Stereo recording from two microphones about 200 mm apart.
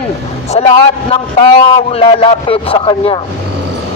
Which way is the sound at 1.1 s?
25° left (ahead or behind).